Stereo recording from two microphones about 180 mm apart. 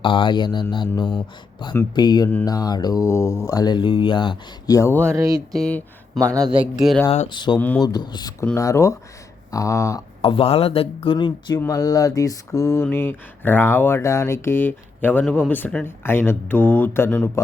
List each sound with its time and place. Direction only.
0.0 s speech: 30° left (ahead or behind)
5.0 s mantra: 15° right (ahead or behind)
5.5 s speech: 5° left (ahead or behind)
6.3 s speech: 20° right (ahead or behind)
6.6 s speech: centre (ahead or behind)
7.1 s speech: 30° left (ahead or behind)
8.5 s mantra: 15° left (ahead or behind)
9.5 s speech: 20° left (ahead or behind)
10.2 s speech: 30° left (ahead or behind)
11.6 s mantra: 20° left (ahead or behind)